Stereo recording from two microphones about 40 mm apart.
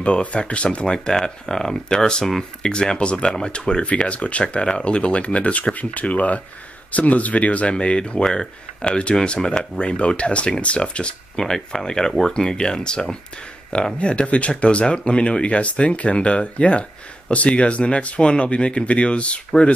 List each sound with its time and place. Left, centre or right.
0.0 s speech: left
7.7 s speech: left
8.2 s speech: centre
8.8 s speech: left
11.3 s speech: centre
13.9 s speech: left